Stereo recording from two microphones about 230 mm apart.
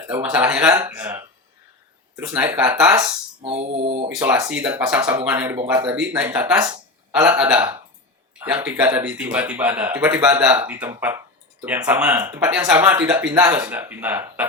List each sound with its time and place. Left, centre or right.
0.1 s speech: centre
2.9 s speech: centre
3.5 s mantra: right
4.2 s speech: centre